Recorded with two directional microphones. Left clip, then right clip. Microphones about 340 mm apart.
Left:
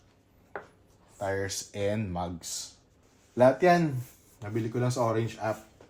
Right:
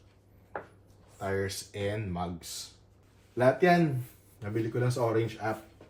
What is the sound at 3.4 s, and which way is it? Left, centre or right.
Speech, left.